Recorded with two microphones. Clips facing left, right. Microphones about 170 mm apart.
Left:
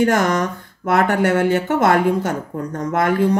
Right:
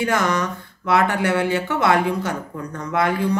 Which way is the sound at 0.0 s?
45° left (ahead or behind).